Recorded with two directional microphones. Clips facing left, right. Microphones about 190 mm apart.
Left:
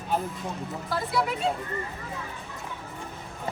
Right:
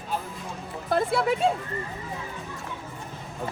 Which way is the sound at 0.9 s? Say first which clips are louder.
Right 5 dB; 55° right (ahead or behind).